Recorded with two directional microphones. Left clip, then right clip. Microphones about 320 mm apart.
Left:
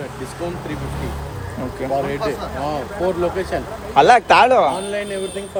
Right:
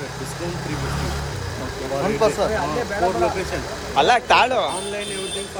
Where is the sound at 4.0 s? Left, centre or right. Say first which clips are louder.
Left 5 dB; centre.